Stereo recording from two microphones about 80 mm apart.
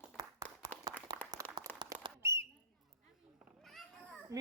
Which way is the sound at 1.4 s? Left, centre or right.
Left.